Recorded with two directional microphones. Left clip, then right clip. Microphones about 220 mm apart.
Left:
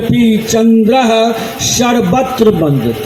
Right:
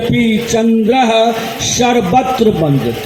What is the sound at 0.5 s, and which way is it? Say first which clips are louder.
A man's voice: left 2 dB; 35° left (ahead or behind).